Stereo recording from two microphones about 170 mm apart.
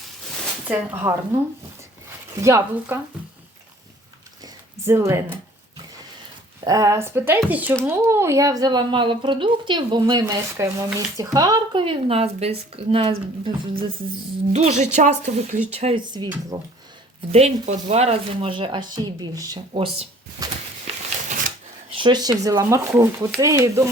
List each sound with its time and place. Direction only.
0.7 s speech: 15° right (ahead or behind)
2.3 s speech: 15° right (ahead or behind)
4.9 s speech: 15° right (ahead or behind)
6.7 s speech: 20° right (ahead or behind)
14.5 s a woman's voice: 40° right (ahead or behind); by 16.3 s 25° right (ahead or behind)
17.3 s speech: 40° right (ahead or behind)
21.9 s speech: 25° right (ahead or behind)